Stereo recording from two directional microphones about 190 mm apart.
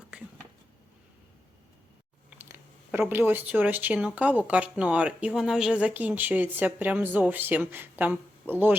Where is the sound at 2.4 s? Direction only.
10° right (ahead or behind).